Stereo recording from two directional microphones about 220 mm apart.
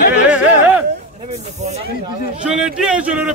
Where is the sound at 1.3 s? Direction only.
30° right (ahead or behind).